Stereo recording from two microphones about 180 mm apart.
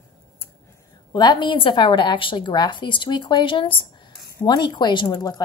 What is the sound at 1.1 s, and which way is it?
A woman's voice, 25° left (ahead or behind).